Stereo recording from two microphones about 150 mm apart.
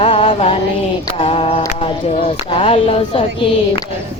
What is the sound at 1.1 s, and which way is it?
Speech, 40° left (ahead or behind).